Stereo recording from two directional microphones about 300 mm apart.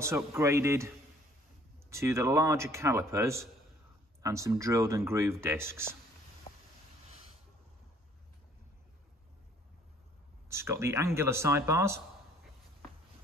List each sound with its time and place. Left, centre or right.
0.0 s speech: centre
6.5 s a sound: left
10.5 s speech: centre